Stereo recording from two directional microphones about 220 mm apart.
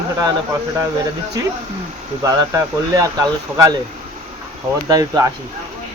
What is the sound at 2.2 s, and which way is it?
Speech, 15° right (ahead or behind).